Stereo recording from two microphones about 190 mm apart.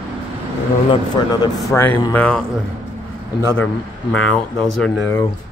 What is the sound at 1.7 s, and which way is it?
Speech, 15° left (ahead or behind).